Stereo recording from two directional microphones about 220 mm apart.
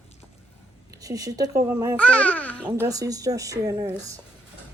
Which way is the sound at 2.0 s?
5° left (ahead or behind).